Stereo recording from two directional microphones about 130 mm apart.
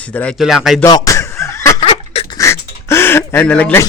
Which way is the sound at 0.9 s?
25° left (ahead or behind).